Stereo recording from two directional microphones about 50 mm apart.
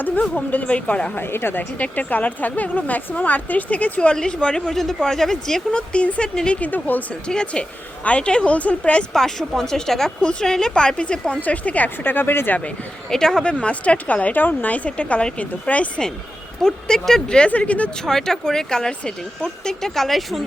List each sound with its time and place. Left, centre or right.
0.2 s a woman's voice: left
1.1 s a woman's voice: left
1.8 s speech: left
4.1 s speech: centre
4.6 s speech: centre
5.9 s a woman's voice: left
6.6 s speech: left
7.1 s a woman's voice: centre
9.1 s speech: centre
11.3 s speech: left
12.0 s a woman's voice: left
13.1 s a woman's voice: centre; by 15.9 s left
16.6 s a woman's voice: centre
18.0 s speech: centre